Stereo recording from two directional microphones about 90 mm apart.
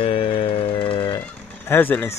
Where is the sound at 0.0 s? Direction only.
90° left.